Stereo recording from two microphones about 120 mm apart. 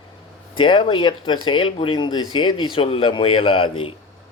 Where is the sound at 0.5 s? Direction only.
45° left (ahead or behind).